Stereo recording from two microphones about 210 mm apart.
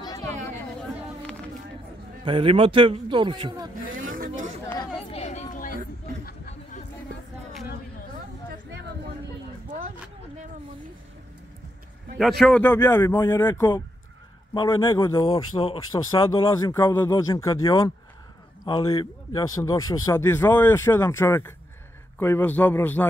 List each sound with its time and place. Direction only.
0.0 s chatter: 15° left (ahead or behind)
0.7 s chatter: 5° left (ahead or behind)
2.2 s a man's voice: 25° right (ahead or behind)
4.0 s chatter: 40° right (ahead or behind)
5.1 s chatter: 30° left (ahead or behind)
9.7 s a sound: 35° right (ahead or behind)
12.2 s speech: centre (ahead or behind)